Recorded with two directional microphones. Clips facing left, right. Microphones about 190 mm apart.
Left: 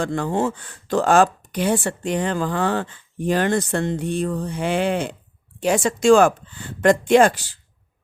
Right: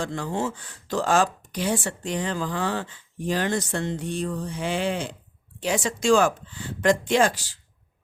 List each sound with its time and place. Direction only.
0.0 s speech: 55° left (ahead or behind)